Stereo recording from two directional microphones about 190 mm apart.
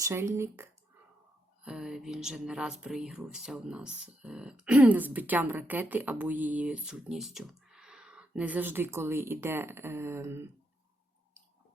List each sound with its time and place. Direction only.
0.0 s speech: 15° right (ahead or behind)